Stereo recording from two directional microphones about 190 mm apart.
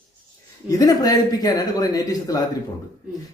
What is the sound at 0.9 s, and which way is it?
Speech, 20° left (ahead or behind).